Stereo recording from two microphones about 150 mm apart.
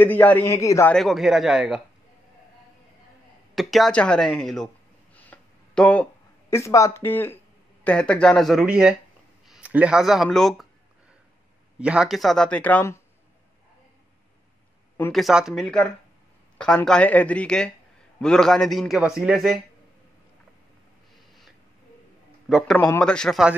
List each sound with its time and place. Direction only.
0.0 s speech: 10° left (ahead or behind)
0.9 s a man's voice: centre (ahead or behind)
3.5 s a man's voice: centre (ahead or behind)
5.1 s a sound: 10° left (ahead or behind)
6.5 s a man's voice: 20° left (ahead or behind); by 10.7 s centre (ahead or behind)
11.8 s a man's voice: 5° right (ahead or behind); by 13.0 s 15° left (ahead or behind)
15.1 s a man's voice: centre (ahead or behind)
22.5 s a man's voice: centre (ahead or behind)
22.8 s a man's voice: 10° left (ahead or behind)